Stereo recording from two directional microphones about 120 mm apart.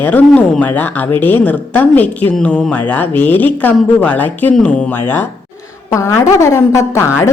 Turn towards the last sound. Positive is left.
turn(degrees=25)  # may be behind; listen again after turning